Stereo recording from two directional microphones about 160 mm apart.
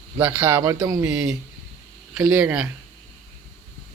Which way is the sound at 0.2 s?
10° right (ahead or behind).